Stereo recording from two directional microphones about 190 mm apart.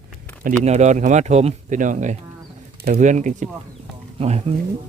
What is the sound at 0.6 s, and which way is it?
Speech, 35° right (ahead or behind).